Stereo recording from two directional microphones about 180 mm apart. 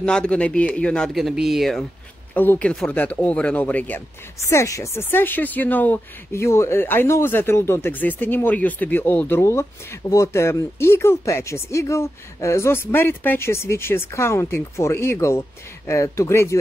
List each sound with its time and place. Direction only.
0.0 s speech: 5° left (ahead or behind)